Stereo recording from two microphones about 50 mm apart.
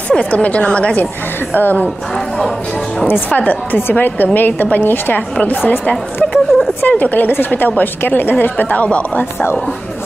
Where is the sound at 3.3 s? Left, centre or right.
Left.